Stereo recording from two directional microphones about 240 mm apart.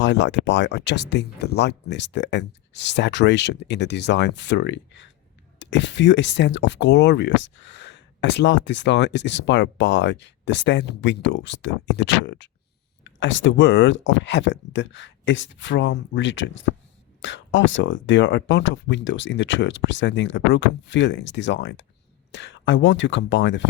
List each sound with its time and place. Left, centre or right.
0.0 s speech: left